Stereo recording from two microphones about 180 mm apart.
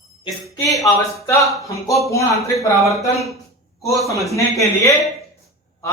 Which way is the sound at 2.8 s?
Centre (ahead or behind).